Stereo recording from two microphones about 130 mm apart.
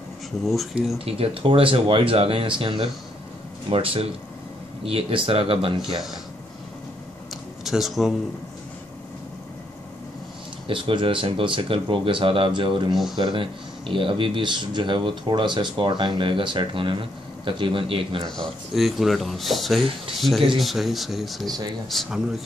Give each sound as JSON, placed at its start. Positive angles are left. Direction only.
{"t": 0.5, "sound": "speech", "side_deg": 0}
{"t": 0.9, "sound": "speech", "side_deg": -50}
{"t": 7.6, "sound": "speech", "side_deg": 0}
{"t": 10.7, "sound": "speech", "side_deg": -40}
{"t": 18.3, "sound": "speech", "side_deg": 0}
{"t": 21.5, "sound": "speech", "side_deg": -30}
{"t": 21.8, "sound": "speech", "side_deg": 0}